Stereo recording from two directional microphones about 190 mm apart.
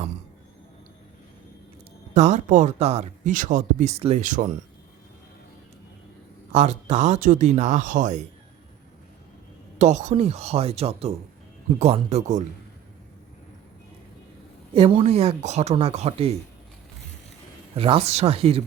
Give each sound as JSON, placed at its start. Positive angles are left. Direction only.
{"t": 2.1, "sound": "speech", "side_deg": -40}
{"t": 6.5, "sound": "speech", "side_deg": -35}
{"t": 9.7, "sound": "speech", "side_deg": -40}
{"t": 14.7, "sound": "speech", "side_deg": -30}
{"t": 17.7, "sound": "speech", "side_deg": -30}